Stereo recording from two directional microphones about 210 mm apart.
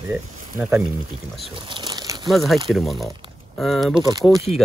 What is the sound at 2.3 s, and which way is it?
Speech, centre (ahead or behind).